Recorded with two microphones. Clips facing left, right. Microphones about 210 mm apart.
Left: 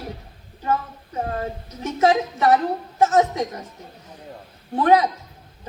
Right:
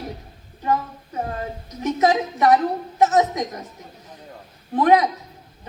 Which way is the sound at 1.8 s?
30° left (ahead or behind).